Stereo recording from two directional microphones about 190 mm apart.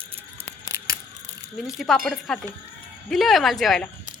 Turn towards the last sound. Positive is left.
turn(degrees=0)  # may be behind; listen again after turning